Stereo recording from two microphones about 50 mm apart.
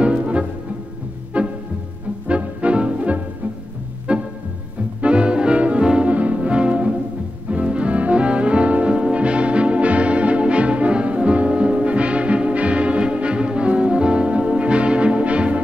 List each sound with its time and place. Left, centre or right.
0.0 s music: right